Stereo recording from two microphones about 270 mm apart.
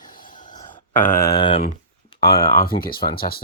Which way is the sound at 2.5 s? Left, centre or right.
Left.